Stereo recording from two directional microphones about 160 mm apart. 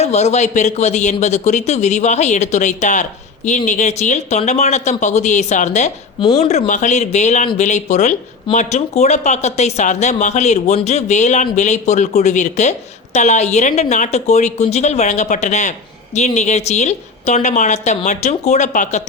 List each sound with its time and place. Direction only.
0.0 s speech: 45° left (ahead or behind)
6.1 s speech: 30° left (ahead or behind); by 19.0 s 50° left (ahead or behind)